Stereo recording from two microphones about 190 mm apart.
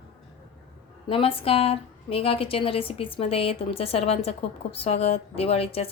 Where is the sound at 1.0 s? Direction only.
30° left (ahead or behind).